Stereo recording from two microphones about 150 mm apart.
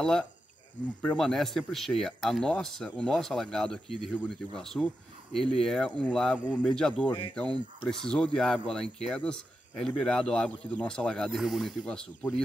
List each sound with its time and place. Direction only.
0.0 s speech: 5° left (ahead or behind)
7.1 s speech: 30° left (ahead or behind)
7.3 s speech: 5° left (ahead or behind)